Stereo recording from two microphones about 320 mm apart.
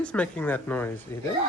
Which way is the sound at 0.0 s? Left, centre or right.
Centre.